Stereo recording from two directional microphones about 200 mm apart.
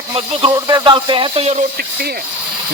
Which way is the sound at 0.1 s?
30° right (ahead or behind).